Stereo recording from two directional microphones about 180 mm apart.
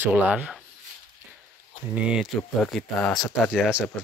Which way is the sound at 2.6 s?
5° left (ahead or behind).